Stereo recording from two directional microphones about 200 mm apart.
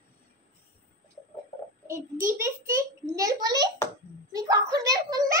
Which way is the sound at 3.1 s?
20° right (ahead or behind).